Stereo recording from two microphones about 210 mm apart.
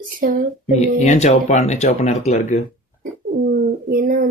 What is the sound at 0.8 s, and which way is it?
Speech, 35° left (ahead or behind).